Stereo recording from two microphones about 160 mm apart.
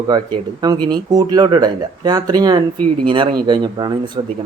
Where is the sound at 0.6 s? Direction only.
25° right (ahead or behind).